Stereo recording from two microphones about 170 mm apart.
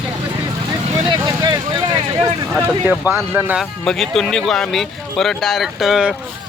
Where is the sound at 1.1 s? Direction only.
30° right (ahead or behind).